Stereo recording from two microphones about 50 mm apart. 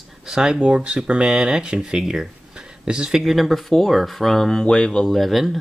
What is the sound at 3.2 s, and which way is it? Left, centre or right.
Speech, centre.